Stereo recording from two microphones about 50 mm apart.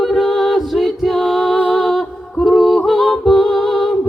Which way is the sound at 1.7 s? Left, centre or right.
Centre.